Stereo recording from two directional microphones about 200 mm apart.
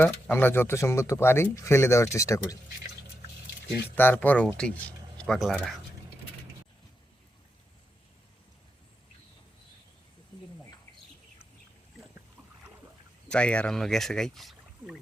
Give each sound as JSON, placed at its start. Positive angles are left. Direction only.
{"t": 0.0, "sound": "speech", "side_deg": 10}
{"t": 3.9, "sound": "speech", "side_deg": 10}
{"t": 13.3, "sound": "speech", "side_deg": 5}